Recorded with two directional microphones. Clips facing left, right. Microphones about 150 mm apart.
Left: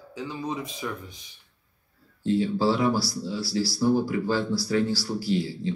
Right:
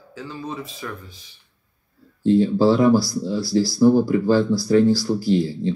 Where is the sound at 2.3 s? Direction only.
45° right (ahead or behind).